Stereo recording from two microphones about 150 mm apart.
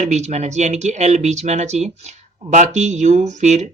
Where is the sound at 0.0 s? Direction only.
50° right (ahead or behind).